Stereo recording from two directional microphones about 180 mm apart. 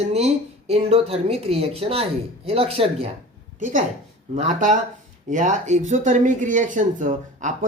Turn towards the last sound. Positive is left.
turn(degrees=-45)  # may be behind; listen again after turning